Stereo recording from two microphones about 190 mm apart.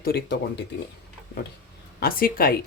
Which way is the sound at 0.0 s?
60° left (ahead or behind).